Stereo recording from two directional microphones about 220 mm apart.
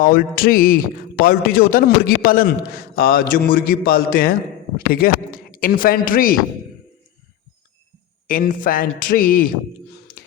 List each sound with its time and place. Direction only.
0.0 s a man's voice: 40° left (ahead or behind)
8.3 s a man's voice: 40° left (ahead or behind)